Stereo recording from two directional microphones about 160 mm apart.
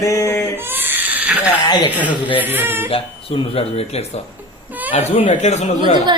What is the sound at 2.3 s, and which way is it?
Speech, 10° right (ahead or behind).